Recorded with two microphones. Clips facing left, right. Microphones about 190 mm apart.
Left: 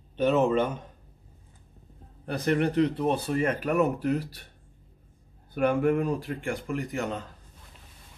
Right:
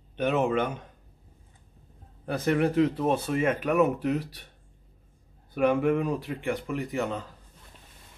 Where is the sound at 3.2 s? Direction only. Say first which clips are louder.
Right 1 dB; 35° left (ahead or behind).